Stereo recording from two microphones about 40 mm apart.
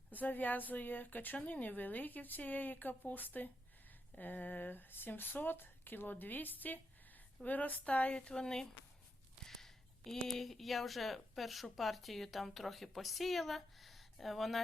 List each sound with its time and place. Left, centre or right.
0.1 s a woman's voice: left
7.9 s speech: left; by 14.6 s centre